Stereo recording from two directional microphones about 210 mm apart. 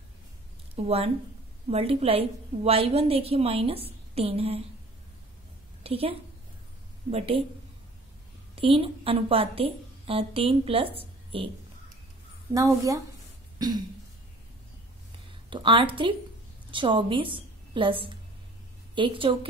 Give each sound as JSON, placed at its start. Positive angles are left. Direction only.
{"t": 0.7, "sound": "a woman's voice", "side_deg": -30}
{"t": 5.9, "sound": "a woman's voice", "side_deg": -25}
{"t": 8.5, "sound": "a woman's voice", "side_deg": -25}
{"t": 12.5, "sound": "speech", "side_deg": -15}
{"t": 13.6, "sound": "throat clearing", "side_deg": -20}
{"t": 15.5, "sound": "a woman's voice", "side_deg": -25}